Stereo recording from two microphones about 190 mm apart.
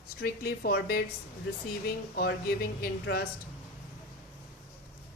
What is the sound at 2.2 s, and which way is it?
Speech, 50° left (ahead or behind).